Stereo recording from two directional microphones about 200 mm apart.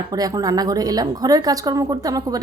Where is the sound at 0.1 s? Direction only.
20° right (ahead or behind).